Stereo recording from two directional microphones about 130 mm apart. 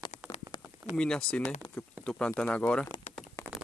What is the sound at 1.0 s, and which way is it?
Speech, 5° left (ahead or behind).